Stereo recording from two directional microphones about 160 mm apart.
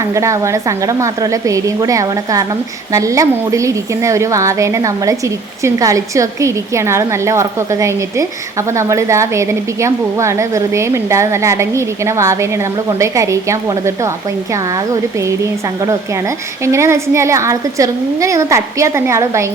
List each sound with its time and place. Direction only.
0.0 s a woman's voice: 20° right (ahead or behind)
16.6 s a woman's voice: 15° right (ahead or behind)